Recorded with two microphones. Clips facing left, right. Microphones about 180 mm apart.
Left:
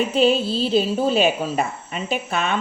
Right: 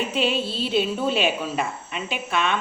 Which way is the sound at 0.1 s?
40° left (ahead or behind).